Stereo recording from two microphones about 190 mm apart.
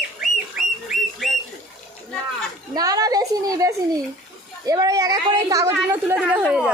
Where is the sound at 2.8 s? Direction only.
20° right (ahead or behind).